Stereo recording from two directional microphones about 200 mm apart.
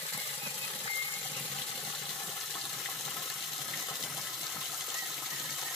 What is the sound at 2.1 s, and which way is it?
Water, centre (ahead or behind).